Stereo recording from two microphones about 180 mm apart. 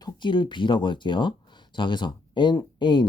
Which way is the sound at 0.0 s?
25° left (ahead or behind).